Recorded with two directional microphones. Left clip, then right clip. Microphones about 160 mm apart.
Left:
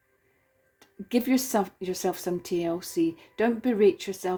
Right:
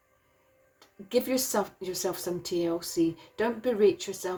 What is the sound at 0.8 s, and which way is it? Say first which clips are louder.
Speech: right 1 dB; 55° left (ahead or behind).